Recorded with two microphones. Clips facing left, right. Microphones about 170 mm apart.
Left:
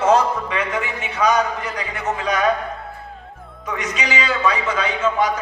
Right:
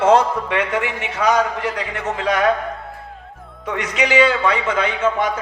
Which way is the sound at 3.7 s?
60° right (ahead or behind).